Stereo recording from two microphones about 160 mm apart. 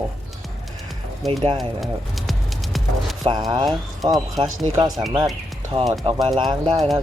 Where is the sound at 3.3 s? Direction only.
30° right (ahead or behind).